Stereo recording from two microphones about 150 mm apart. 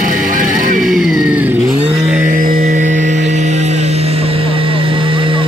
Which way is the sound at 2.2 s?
70° right (ahead or behind).